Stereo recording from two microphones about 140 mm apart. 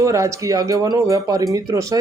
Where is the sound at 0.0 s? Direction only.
20° right (ahead or behind).